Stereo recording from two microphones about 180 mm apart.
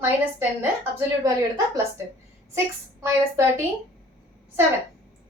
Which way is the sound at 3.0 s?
15° right (ahead or behind).